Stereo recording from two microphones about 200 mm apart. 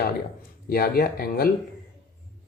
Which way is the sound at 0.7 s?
50° left (ahead or behind).